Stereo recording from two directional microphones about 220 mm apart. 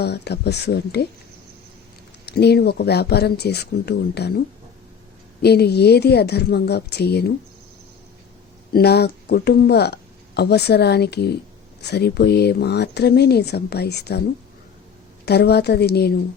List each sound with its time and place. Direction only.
0.0 s speech: 50° left (ahead or behind)
2.2 s speech: 45° left (ahead or behind)
8.7 s speech: 45° left (ahead or behind)
15.3 s speech: 45° left (ahead or behind)